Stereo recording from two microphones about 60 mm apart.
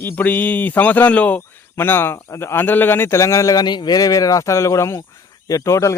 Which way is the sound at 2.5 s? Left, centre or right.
Left.